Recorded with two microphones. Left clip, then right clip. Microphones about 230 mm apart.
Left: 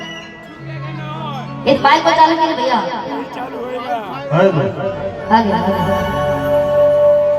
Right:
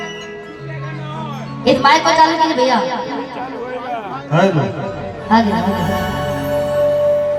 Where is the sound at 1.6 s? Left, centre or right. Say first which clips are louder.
Even; right.